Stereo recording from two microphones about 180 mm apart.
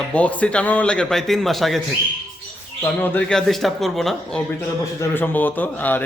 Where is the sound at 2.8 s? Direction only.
10° left (ahead or behind).